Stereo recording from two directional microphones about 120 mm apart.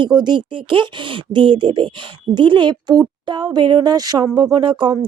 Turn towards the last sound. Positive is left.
turn(degrees=-40)  # may be behind; listen again after turning